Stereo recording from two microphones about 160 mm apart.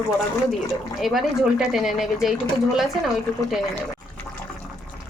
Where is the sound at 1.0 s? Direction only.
Centre (ahead or behind).